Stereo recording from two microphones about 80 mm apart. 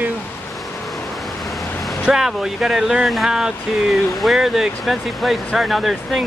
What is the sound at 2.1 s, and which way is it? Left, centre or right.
Speech, centre.